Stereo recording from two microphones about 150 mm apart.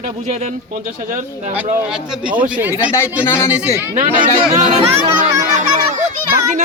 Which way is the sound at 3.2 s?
15° left (ahead or behind).